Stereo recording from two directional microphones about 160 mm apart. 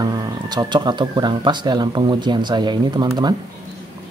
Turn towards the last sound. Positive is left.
turn(degrees=-25)  # may be behind; listen again after turning